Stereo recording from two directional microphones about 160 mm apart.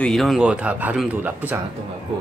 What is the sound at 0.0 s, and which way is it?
Speech, centre (ahead or behind).